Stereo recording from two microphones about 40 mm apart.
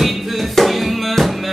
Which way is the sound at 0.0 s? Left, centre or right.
Centre.